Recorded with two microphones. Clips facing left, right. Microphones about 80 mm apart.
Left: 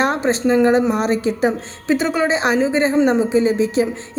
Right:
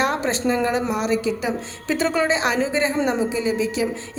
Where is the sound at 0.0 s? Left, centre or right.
Left.